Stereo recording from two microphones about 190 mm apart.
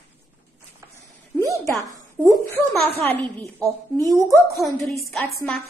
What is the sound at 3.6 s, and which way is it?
Speech, 20° right (ahead or behind).